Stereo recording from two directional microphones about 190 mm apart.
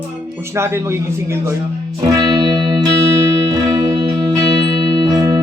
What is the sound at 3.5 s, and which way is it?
Music, 20° right (ahead or behind).